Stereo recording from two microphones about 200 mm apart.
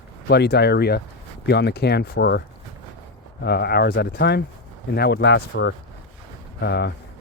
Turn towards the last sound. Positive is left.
turn(degrees=55)  # may be behind; listen again after turning